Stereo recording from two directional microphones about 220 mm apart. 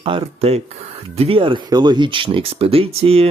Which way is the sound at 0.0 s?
25° right (ahead or behind).